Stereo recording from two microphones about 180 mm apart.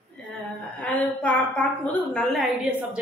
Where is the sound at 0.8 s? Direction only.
10° left (ahead or behind).